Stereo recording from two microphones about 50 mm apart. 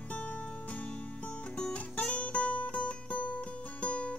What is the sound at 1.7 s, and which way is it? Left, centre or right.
Music, left.